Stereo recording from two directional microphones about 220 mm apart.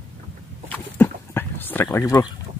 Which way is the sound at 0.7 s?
10° left (ahead or behind).